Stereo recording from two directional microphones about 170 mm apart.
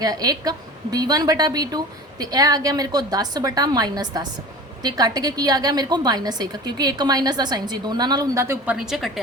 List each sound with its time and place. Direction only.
0.0 s a woman's voice: 20° right (ahead or behind)
8.7 s a woman's voice: 5° right (ahead or behind)